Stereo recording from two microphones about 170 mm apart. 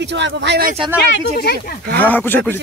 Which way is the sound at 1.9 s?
10° left (ahead or behind).